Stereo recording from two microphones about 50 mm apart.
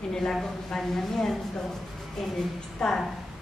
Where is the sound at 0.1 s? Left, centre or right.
Centre.